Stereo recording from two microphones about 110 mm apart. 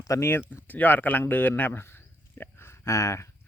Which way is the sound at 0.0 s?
30° left (ahead or behind).